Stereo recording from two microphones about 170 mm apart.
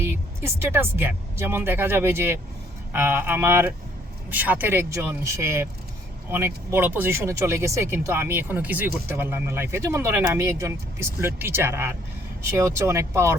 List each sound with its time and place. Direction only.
0.0 s speech: 15° right (ahead or behind)